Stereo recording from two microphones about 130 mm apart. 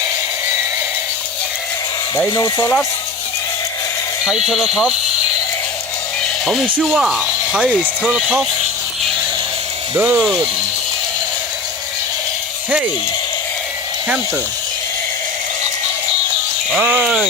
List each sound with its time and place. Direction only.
2.1 s speech: 30° left (ahead or behind)
4.4 s speech: 5° right (ahead or behind)
6.4 s speech: centre (ahead or behind)
9.9 s speech: 15° right (ahead or behind)
16.7 s speech: 10° right (ahead or behind)